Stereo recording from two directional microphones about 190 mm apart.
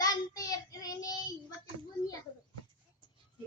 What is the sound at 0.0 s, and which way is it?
Child singing, 20° left (ahead or behind).